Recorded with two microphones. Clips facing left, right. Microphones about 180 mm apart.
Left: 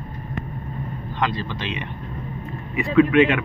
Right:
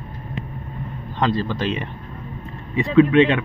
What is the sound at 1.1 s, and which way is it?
Speech, 40° right (ahead or behind).